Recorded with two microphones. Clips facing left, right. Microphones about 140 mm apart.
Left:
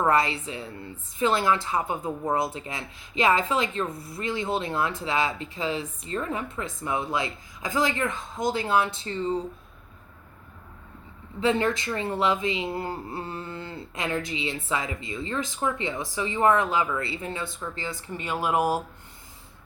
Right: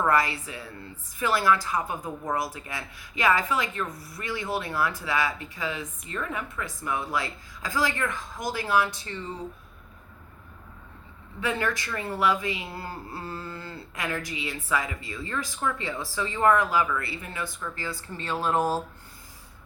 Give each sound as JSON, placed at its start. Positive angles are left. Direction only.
{"t": 0.0, "sound": "speech", "side_deg": 25}
{"t": 11.3, "sound": "speech", "side_deg": 25}